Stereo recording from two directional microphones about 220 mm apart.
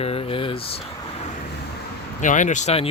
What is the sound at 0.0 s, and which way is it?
Speech, 25° left (ahead or behind).